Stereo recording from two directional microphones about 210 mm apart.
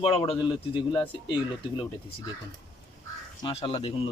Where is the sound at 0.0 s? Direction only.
25° left (ahead or behind).